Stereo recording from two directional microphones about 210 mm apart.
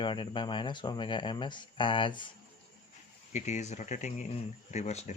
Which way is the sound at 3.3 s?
35° left (ahead or behind).